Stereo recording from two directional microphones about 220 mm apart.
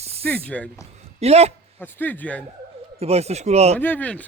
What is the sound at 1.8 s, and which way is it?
Speech, 10° left (ahead or behind).